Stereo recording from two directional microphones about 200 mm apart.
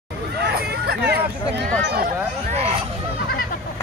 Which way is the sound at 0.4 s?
55° right (ahead or behind).